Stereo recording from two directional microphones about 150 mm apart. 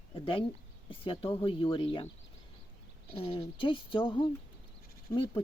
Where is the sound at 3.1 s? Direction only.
35° left (ahead or behind).